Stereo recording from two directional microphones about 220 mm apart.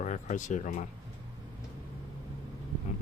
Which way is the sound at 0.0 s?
35° left (ahead or behind).